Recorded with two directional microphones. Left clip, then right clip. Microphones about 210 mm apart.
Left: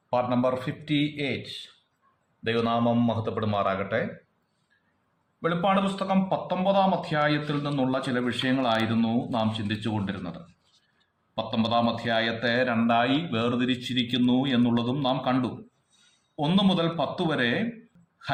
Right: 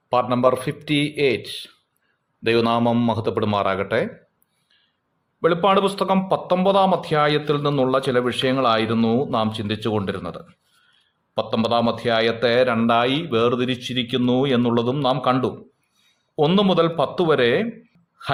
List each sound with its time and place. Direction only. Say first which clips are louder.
0.1 s speech: right 7 dB; 50° right (ahead or behind)
5.4 s a man's voice: right 8 dB; 50° right (ahead or behind)